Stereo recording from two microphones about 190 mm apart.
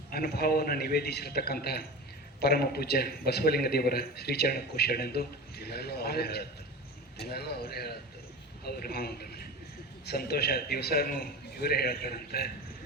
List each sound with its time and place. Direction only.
0.1 s a man's voice: 55° left (ahead or behind)